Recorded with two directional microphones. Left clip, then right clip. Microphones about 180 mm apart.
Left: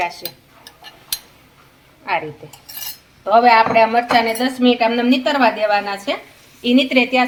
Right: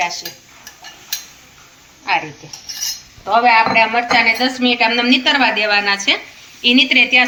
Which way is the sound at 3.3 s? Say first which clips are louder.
Even; 65° left (ahead or behind).